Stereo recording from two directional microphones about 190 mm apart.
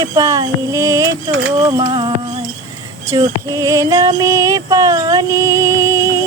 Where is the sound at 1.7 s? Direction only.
20° right (ahead or behind).